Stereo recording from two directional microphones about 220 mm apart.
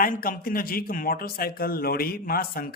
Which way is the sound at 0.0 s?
40° left (ahead or behind).